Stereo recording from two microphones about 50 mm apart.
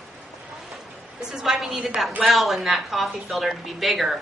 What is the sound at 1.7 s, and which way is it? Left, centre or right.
A woman's voice, centre.